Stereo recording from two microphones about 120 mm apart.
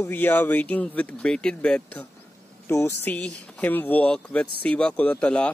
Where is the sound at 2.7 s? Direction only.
25° left (ahead or behind).